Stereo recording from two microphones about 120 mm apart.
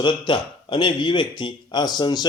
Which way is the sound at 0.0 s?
40° left (ahead or behind).